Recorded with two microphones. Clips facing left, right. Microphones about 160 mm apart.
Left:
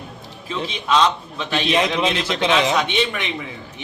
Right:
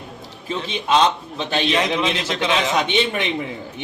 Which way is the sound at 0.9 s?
25° right (ahead or behind).